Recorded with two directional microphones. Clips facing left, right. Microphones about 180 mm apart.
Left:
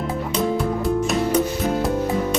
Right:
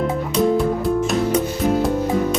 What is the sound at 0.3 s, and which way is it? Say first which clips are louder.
Music: right 4 dB; centre (ahead or behind).